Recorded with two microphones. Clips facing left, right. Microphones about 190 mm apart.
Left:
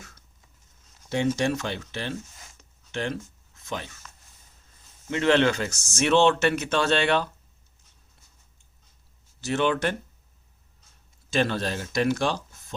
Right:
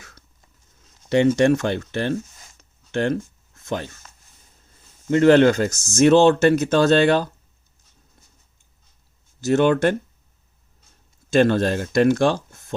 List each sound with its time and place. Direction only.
1.1 s speech: 60° right (ahead or behind)
5.1 s speech: 40° right (ahead or behind)
9.4 s speech: 45° right (ahead or behind)
11.3 s speech: 50° right (ahead or behind)